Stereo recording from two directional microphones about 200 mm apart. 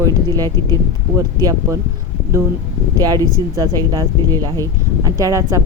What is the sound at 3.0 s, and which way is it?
Speech, 20° right (ahead or behind).